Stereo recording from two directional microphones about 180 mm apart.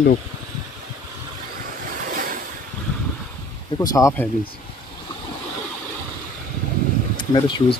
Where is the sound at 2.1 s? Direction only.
50° right (ahead or behind).